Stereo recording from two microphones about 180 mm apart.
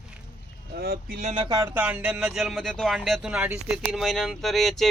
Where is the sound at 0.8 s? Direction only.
55° right (ahead or behind).